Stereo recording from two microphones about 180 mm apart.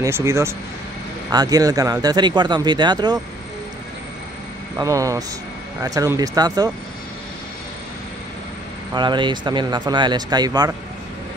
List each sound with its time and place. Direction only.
0.0 s speech: 15° right (ahead or behind)
4.7 s speech: 20° right (ahead or behind)
8.9 s speech: 25° right (ahead or behind)